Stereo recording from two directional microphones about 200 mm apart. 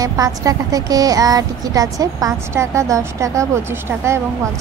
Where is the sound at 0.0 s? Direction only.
20° right (ahead or behind).